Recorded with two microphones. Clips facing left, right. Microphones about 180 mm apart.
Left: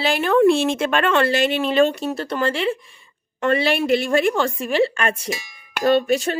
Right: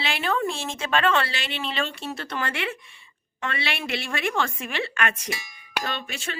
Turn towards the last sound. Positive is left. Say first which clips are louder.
# left 16 dB
turn(degrees=40)  # may be behind; listen again after turning